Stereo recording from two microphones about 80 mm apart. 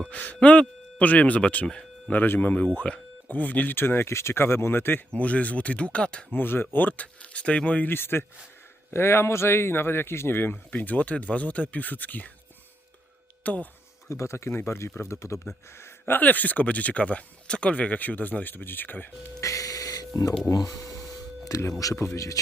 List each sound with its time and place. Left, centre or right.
0.1 s speech: centre
2.1 s speech: left
6.4 s speech: left
13.4 s speech: centre
14.1 s speech: left
15.8 s speech: left
19.4 s music: left
20.5 s speech: left